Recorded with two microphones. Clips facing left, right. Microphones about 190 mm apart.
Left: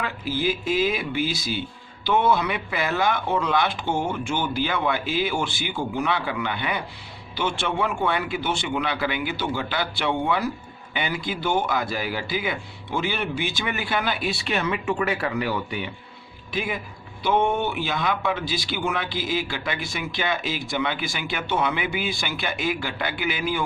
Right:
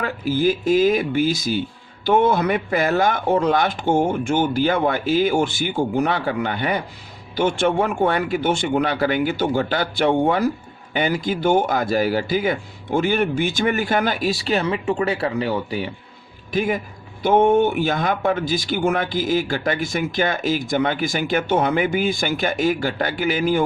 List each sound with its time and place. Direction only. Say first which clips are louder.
0.0 s speech: right 6 dB; 45° right (ahead or behind)
16.5 s speech: right 7 dB; 45° right (ahead or behind)